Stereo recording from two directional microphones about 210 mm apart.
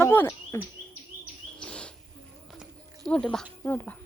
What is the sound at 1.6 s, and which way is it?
Bird, 5° left (ahead or behind).